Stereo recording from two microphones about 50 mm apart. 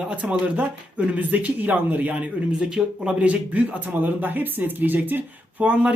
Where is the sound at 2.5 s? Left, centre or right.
Centre.